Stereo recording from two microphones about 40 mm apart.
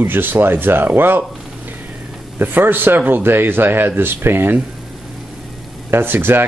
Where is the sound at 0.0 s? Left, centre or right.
Right.